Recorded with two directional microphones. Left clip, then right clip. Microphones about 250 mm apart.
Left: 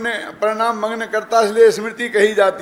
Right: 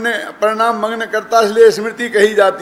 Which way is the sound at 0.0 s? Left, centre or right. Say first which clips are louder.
Right 4 dB; centre.